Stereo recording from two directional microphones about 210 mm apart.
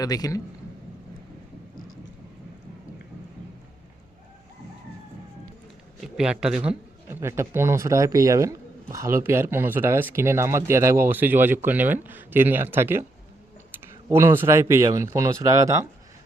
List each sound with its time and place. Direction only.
0.0 s a man's voice: 15° left (ahead or behind)
6.0 s speech: 5° right (ahead or behind)